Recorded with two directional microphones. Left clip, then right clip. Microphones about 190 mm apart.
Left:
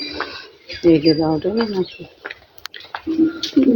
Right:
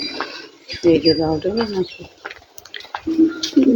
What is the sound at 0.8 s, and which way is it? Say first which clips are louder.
Speech: even; 50° left (ahead or behind).